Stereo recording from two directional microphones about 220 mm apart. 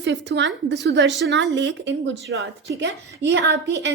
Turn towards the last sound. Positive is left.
turn(degrees=-50)  # may be behind; listen again after turning